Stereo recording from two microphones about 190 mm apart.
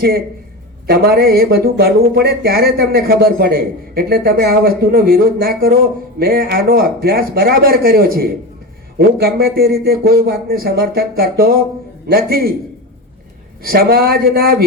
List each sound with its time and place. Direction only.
0.9 s speech: 55° right (ahead or behind)
13.6 s speech: 55° right (ahead or behind)